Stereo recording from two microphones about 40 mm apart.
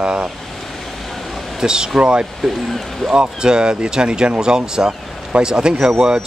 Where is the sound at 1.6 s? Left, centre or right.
Right.